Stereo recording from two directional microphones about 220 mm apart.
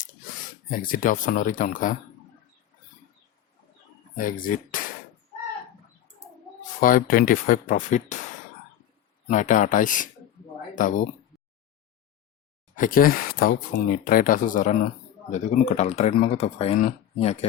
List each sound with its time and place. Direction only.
0.7 s speech: 40° left (ahead or behind)
4.2 s speech: 40° left (ahead or behind)
6.7 s speech: 40° left (ahead or behind)
9.2 s speech: 35° left (ahead or behind)
12.7 s speech: 40° left (ahead or behind)